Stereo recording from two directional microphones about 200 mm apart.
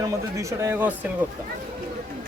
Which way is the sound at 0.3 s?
10° right (ahead or behind).